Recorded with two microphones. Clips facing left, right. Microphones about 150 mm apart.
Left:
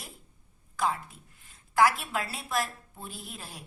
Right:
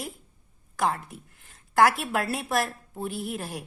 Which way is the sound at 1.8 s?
60° right (ahead or behind).